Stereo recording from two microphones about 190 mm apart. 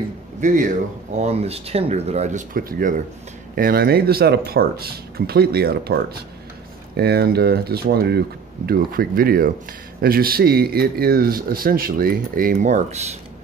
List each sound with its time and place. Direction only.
0.4 s speech: 45° right (ahead or behind)
7.0 s speech: 60° right (ahead or behind); by 13.0 s 40° right (ahead or behind)